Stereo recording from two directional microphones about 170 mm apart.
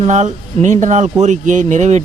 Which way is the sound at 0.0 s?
45° right (ahead or behind).